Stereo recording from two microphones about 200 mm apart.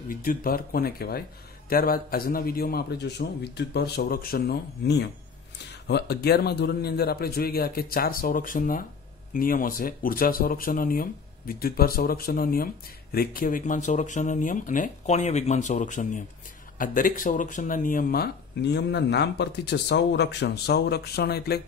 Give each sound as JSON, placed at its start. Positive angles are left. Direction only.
{"t": 0.1, "sound": "speech", "side_deg": 45}